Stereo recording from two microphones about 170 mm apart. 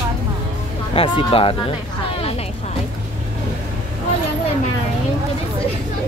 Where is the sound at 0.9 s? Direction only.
30° left (ahead or behind).